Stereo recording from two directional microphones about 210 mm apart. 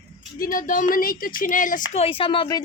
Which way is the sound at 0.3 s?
40° left (ahead or behind).